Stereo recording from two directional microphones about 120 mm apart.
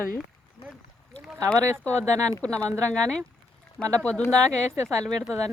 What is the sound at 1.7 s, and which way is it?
Speech, 20° right (ahead or behind).